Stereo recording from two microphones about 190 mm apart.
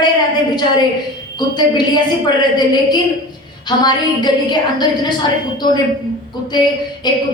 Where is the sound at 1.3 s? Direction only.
20° left (ahead or behind).